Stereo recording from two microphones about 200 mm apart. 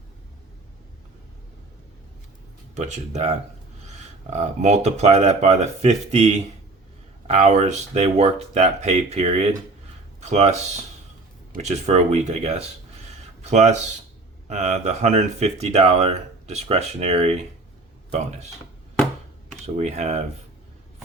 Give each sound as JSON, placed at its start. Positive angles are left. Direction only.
{"t": 2.7, "sound": "speech", "side_deg": -35}
{"t": 19.6, "sound": "speech", "side_deg": -35}